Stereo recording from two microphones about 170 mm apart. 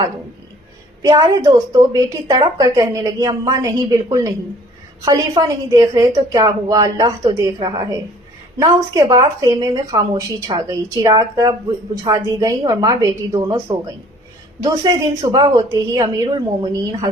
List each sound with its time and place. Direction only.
1.0 s speech: 20° right (ahead or behind)